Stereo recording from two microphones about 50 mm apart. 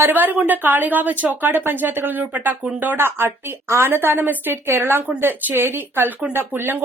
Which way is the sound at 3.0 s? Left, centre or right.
Right.